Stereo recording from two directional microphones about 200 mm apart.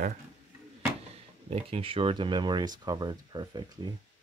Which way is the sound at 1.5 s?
30° right (ahead or behind).